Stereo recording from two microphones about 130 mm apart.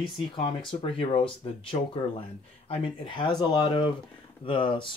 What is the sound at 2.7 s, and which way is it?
Speech, 40° left (ahead or behind).